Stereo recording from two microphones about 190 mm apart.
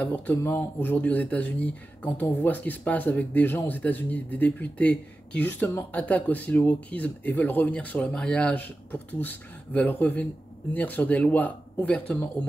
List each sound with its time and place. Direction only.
0.0 s speech: 10° left (ahead or behind)